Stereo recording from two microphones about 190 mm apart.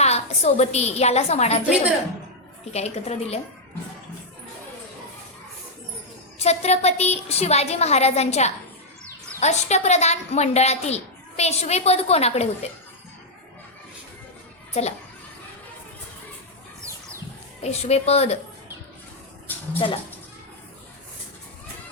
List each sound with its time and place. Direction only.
0.0 s a woman's voice: 35° left (ahead or behind)
2.7 s a woman's voice: 35° left (ahead or behind)
6.4 s a woman's voice: 35° left (ahead or behind)
14.7 s a child's voice: 35° left (ahead or behind)
17.6 s a woman's voice: 35° left (ahead or behind)
19.8 s a woman's voice: 25° left (ahead or behind)